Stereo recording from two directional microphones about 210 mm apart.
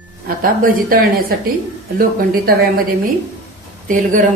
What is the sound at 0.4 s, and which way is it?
A woman's voice, 40° right (ahead or behind).